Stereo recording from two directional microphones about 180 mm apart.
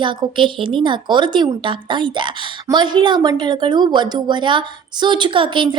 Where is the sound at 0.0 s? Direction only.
25° right (ahead or behind).